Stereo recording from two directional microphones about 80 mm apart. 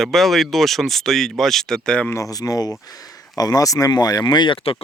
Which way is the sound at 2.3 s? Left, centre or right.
Left.